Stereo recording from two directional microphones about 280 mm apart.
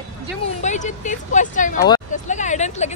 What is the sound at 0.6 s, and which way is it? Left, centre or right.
Speech, left.